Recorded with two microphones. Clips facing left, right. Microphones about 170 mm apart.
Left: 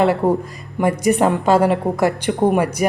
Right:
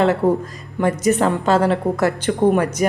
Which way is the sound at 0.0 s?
10° left (ahead or behind).